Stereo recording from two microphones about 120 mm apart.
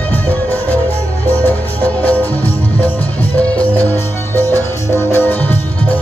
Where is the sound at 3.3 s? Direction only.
15° left (ahead or behind).